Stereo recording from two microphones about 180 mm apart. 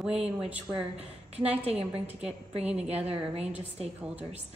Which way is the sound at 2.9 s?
35° right (ahead or behind).